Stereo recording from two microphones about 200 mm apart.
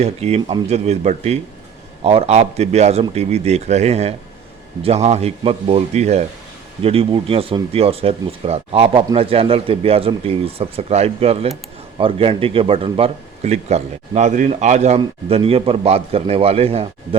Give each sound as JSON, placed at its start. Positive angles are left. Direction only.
{"t": 0.0, "sound": "speech", "side_deg": -30}